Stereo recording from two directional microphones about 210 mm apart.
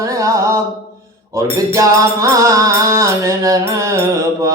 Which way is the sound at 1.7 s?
15° right (ahead or behind).